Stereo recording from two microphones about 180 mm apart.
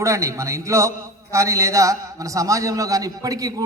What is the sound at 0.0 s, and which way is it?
A man's voice, 15° right (ahead or behind).